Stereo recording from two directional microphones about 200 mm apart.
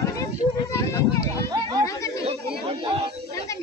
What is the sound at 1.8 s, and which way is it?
Chatter, 15° left (ahead or behind).